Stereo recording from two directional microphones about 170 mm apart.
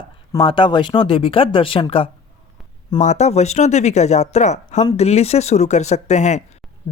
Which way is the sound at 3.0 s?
45° left (ahead or behind).